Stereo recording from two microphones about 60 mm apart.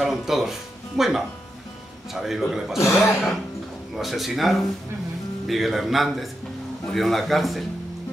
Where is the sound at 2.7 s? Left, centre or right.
Left.